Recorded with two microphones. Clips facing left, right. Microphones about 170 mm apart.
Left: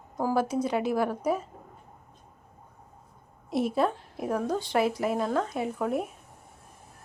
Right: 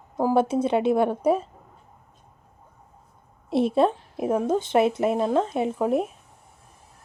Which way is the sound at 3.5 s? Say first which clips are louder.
Right 6 dB; 25° right (ahead or behind).